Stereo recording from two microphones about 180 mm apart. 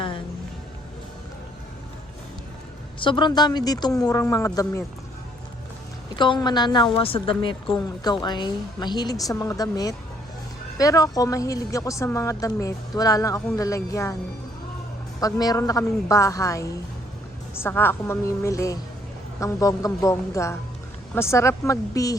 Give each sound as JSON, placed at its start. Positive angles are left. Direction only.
{"t": 3.0, "sound": "a woman's voice", "side_deg": 25}
{"t": 6.1, "sound": "a woman's voice", "side_deg": 25}
{"t": 15.2, "sound": "speech", "side_deg": 20}